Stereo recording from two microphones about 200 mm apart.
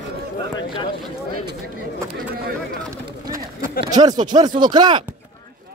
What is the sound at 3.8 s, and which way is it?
Speech, 20° right (ahead or behind).